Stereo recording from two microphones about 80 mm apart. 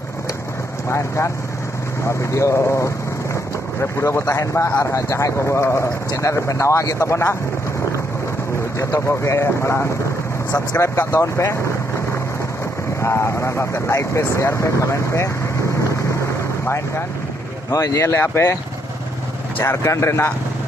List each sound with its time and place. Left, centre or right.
0.8 s speech: left
8.7 s speech: left
11.1 s speech: left
13.0 s speech: left
16.6 s speech: left
17.6 s speech: left
19.6 s speech: left